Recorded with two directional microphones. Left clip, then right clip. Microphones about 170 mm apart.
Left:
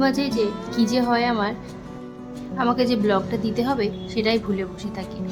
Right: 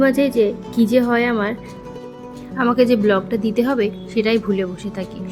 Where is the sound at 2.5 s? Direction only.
15° right (ahead or behind).